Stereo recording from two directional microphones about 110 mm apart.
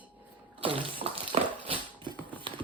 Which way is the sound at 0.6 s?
55° right (ahead or behind).